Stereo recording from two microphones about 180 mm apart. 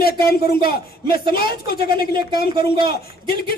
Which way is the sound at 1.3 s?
60° left (ahead or behind).